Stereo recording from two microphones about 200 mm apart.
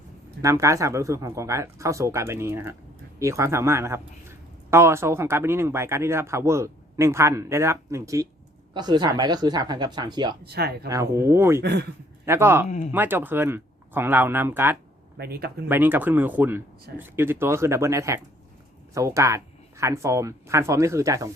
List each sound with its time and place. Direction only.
0.4 s a man's voice: 15° right (ahead or behind)
10.4 s speech: 50° right (ahead or behind)
10.8 s a man's voice: 15° right (ahead or behind)
11.6 s speech: 55° right (ahead or behind)
12.2 s speech: 10° right (ahead or behind)
12.6 s speech: 35° left (ahead or behind)
12.9 s a man's voice: 10° right (ahead or behind)
15.2 s speech: 50° right (ahead or behind)
15.7 s a man's voice: 10° right (ahead or behind)